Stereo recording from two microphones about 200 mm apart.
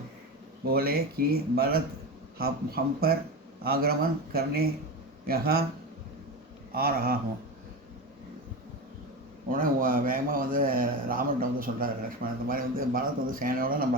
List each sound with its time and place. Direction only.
0.7 s a man's voice: 50° right (ahead or behind)
6.7 s a man's voice: 50° right (ahead or behind)
9.5 s a man's voice: 45° right (ahead or behind)